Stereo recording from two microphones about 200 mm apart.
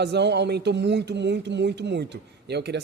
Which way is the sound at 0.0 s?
60° right (ahead or behind).